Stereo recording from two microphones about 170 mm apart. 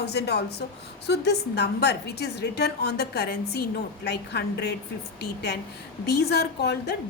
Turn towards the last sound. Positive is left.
turn(degrees=75)  # may be behind; listen again after turning